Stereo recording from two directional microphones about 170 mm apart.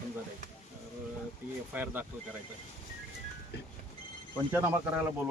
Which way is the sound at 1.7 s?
10° right (ahead or behind).